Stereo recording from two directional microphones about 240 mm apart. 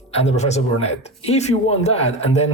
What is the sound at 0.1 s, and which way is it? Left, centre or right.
Speech, left.